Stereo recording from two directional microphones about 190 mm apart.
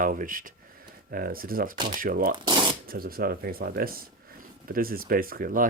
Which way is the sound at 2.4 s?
25° right (ahead or behind).